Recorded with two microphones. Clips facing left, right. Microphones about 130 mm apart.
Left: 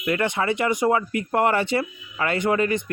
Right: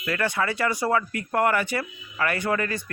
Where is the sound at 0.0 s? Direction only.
20° left (ahead or behind).